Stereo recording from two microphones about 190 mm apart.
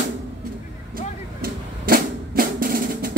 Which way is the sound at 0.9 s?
50° right (ahead or behind).